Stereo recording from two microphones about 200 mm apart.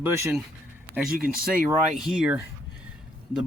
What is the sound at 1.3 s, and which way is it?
Speech, 45° right (ahead or behind).